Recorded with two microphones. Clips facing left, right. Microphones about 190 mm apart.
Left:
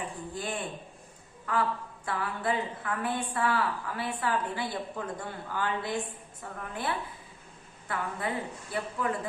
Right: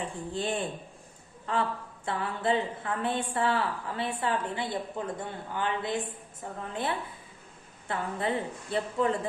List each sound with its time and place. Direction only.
0.3 s a woman's voice: 25° right (ahead or behind)